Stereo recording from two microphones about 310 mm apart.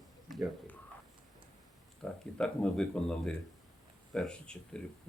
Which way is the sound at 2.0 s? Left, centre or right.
Centre.